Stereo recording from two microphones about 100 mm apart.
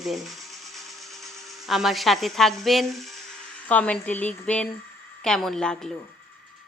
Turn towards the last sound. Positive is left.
turn(degrees=5)  # may be behind; listen again after turning